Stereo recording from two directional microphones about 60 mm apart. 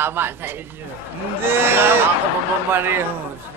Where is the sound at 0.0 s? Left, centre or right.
Right.